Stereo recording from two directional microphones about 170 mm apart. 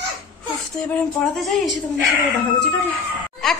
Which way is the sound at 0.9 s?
5° left (ahead or behind).